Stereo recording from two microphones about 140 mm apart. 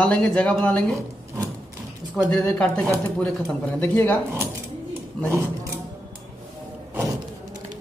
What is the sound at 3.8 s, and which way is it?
Speech, 15° left (ahead or behind).